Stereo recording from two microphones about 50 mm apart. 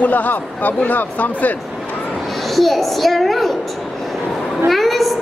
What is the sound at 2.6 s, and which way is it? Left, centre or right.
Speech, centre.